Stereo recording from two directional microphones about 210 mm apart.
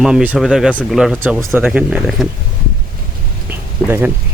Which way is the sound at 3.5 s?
10° right (ahead or behind).